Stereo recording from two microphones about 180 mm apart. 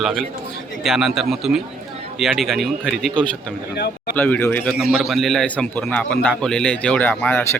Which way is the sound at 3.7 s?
65° left (ahead or behind).